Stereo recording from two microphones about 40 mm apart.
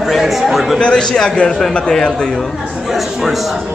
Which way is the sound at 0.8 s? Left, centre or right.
Left.